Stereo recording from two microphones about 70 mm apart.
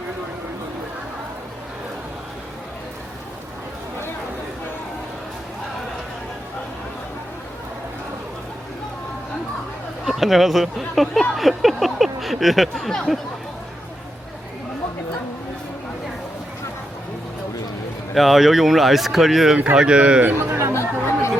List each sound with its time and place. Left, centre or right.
10.1 s speech: centre
18.1 s speech: centre
19.7 s speech: centre
20.2 s speech: right
20.7 s chatter: left